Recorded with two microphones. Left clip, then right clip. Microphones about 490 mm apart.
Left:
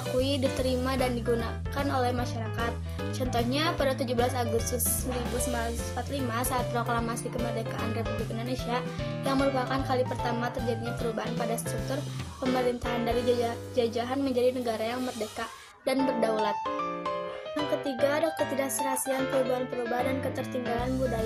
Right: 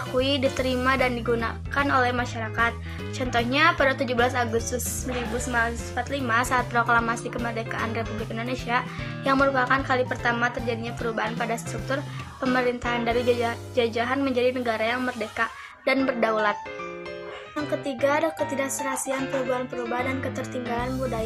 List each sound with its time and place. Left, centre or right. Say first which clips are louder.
0.2 s speech: right 5 dB; left
6.1 s speech: right 8 dB; left
9.2 s speech: right 7 dB; left
12.4 s speech: right 4 dB; left
18.0 s speech: right 4 dB; left